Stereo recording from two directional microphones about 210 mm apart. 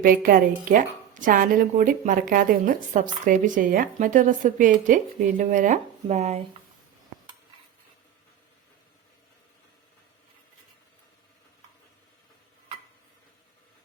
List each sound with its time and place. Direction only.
0.0 s a woman's voice: 45° right (ahead or behind)